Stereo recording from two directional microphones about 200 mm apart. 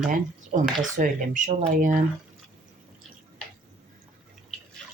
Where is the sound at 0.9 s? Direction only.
40° right (ahead or behind).